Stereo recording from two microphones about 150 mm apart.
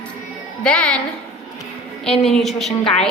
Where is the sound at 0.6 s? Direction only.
10° left (ahead or behind).